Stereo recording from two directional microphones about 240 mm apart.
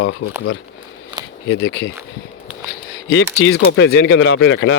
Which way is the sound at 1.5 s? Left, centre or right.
Left.